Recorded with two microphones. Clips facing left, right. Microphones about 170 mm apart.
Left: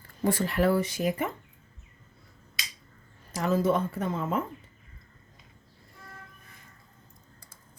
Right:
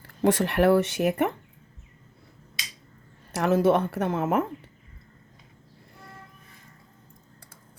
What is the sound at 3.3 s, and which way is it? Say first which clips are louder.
Speech: right 4 dB; 70° right (ahead or behind).